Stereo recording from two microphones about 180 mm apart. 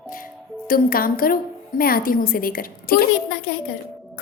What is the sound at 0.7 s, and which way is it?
A woman's voice, 55° left (ahead or behind).